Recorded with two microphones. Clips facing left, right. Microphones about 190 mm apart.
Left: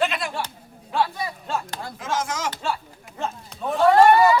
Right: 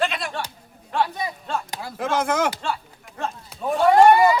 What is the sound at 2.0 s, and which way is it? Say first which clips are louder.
Speech: right 6 dB; 60° right (ahead or behind).